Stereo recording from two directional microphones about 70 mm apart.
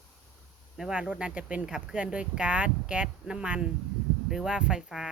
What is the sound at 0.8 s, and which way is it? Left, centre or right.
Speech, centre.